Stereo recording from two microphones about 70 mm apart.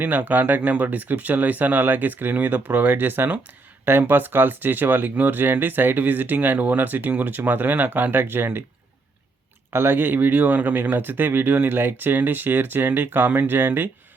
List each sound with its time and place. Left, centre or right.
0.0 s speech: right
9.7 s speech: right